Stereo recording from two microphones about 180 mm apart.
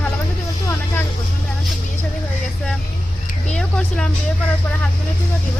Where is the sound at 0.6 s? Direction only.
10° left (ahead or behind).